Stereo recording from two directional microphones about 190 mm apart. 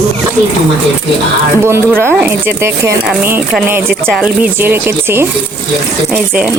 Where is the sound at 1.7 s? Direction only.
15° right (ahead or behind).